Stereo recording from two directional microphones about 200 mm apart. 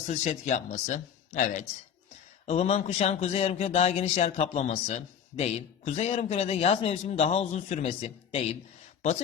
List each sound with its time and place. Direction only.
0.1 s speech: 35° left (ahead or behind)